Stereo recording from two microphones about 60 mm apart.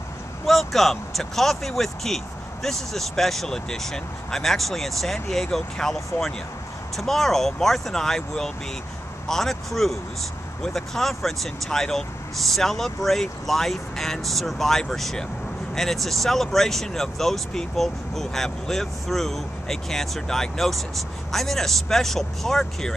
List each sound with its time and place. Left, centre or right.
0.5 s speech: centre